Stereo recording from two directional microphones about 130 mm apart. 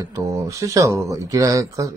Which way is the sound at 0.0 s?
25° right (ahead or behind).